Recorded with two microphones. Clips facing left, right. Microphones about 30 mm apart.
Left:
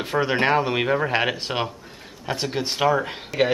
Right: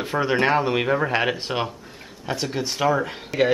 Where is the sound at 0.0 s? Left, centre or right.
Centre.